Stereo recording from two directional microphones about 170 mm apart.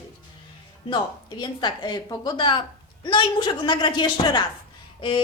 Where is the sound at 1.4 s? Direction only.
25° left (ahead or behind).